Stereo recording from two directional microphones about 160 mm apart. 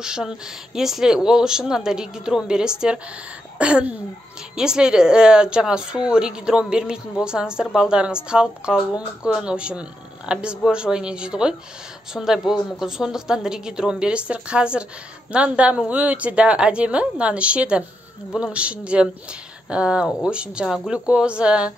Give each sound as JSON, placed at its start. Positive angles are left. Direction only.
{"t": 0.0, "sound": "a woman's voice", "side_deg": -5}